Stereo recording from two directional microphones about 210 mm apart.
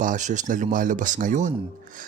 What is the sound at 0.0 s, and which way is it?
A man's voice, 35° right (ahead or behind).